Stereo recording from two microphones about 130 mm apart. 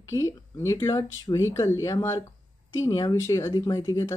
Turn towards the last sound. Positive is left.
turn(degrees=30)  # may be behind; listen again after turning